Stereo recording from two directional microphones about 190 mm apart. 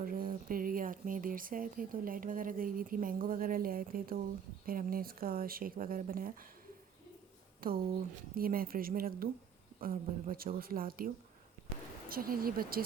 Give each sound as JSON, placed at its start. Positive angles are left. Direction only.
{"t": 0.0, "sound": "speech", "side_deg": -45}
{"t": 7.6, "sound": "speech", "side_deg": -50}